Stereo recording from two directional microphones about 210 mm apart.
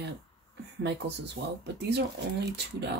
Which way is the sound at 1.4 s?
75° right (ahead or behind).